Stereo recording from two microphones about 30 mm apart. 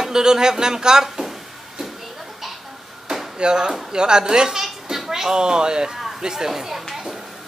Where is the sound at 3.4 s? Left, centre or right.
Right.